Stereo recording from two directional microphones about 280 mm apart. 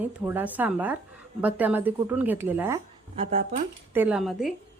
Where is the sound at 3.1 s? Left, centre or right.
Right.